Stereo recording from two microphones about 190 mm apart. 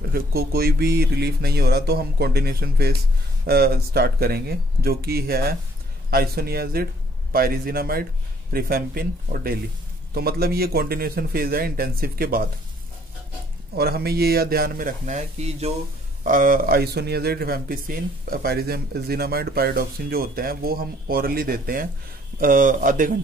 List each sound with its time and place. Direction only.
0.1 s speech: 55° right (ahead or behind)
13.7 s speech: 55° right (ahead or behind)